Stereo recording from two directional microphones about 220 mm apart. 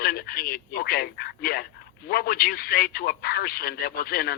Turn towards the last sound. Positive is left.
turn(degrees=45)  # may be behind; listen again after turning